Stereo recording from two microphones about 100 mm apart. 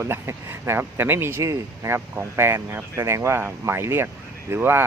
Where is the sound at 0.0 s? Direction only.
25° right (ahead or behind).